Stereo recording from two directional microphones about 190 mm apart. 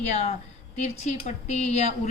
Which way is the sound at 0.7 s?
35° left (ahead or behind).